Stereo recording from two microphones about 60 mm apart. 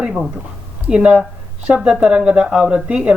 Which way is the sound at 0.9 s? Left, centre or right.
Centre.